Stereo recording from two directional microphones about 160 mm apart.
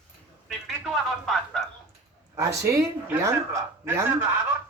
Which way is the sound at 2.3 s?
20° right (ahead or behind).